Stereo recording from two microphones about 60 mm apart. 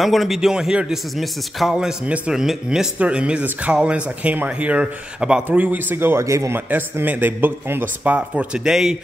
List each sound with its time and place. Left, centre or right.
0.0 s a man's voice: centre
5.5 s a man's voice: right
6.2 s speech: right
6.5 s a man's voice: right
8.6 s a man's voice: centre